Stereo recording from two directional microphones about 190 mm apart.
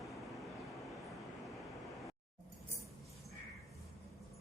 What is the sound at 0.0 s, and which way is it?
Vehicle, centre (ahead or behind).